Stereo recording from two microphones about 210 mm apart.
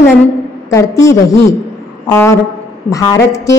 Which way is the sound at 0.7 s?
15° left (ahead or behind).